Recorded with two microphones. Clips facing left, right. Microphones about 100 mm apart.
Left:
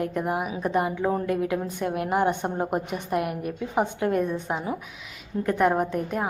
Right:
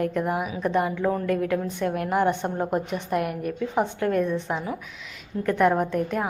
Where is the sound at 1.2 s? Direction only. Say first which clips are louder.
Right 1 dB; 10° left (ahead or behind).